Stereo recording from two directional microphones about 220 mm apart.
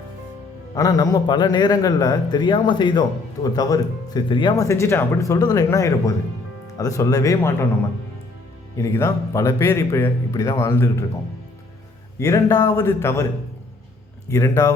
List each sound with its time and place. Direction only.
0.7 s a man's voice: 15° left (ahead or behind)
8.8 s speech: 10° left (ahead or behind)
12.2 s speech: 15° left (ahead or behind)
14.3 s speech: 15° left (ahead or behind)